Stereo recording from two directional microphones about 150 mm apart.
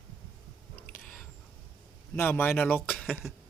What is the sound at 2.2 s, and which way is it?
Speech, 15° left (ahead or behind).